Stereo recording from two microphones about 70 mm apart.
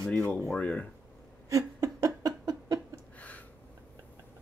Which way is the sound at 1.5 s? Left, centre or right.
Right.